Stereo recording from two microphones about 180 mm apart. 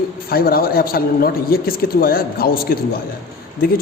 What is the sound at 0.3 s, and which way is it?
A man's voice, 55° left (ahead or behind).